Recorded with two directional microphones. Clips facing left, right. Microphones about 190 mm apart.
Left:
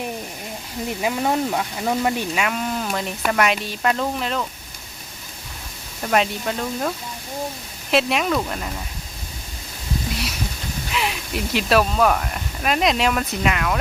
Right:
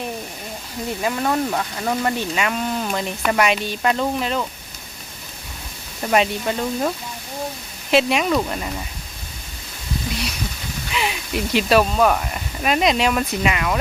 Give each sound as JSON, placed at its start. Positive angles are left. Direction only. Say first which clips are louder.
{"t": 1.0, "sound": "speech", "louder": "even", "side_deg": 15}
{"t": 6.0, "sound": "speech", "louder": "right 2 dB", "side_deg": -5}
{"t": 10.9, "sound": "speech", "louder": "right 2 dB", "side_deg": 0}